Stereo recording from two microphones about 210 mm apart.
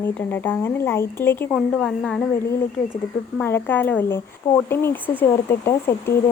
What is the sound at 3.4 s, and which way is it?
A woman's voice, 10° left (ahead or behind).